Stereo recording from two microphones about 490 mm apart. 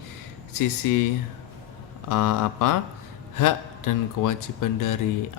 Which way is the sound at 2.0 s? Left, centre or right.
Left.